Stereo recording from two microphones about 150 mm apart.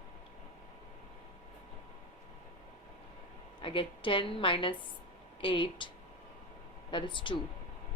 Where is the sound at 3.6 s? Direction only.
35° left (ahead or behind).